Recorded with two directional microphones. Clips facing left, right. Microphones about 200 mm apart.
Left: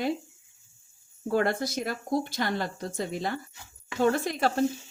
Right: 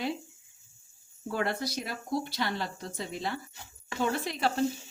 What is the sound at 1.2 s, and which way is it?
Speech, 50° left (ahead or behind).